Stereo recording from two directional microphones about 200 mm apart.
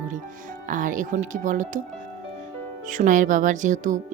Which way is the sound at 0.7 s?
40° right (ahead or behind).